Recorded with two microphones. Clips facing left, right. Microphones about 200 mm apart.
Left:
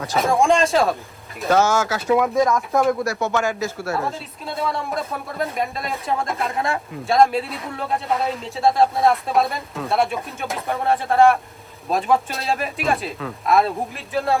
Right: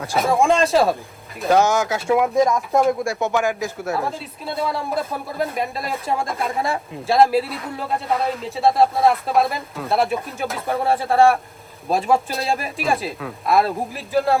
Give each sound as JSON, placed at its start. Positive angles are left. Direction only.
{"t": 0.0, "sound": "speech", "side_deg": 0}
{"t": 1.5, "sound": "speech", "side_deg": -15}
{"t": 4.4, "sound": "speech", "side_deg": 0}